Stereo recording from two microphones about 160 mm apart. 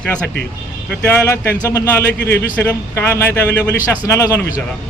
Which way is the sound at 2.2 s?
90° left.